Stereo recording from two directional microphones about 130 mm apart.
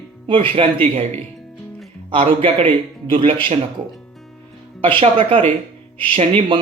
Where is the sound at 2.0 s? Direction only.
45° right (ahead or behind).